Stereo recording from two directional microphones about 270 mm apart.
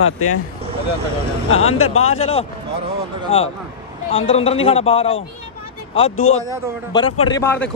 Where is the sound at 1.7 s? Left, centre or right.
Left.